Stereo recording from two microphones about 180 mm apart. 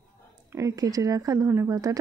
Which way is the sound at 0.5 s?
20° right (ahead or behind).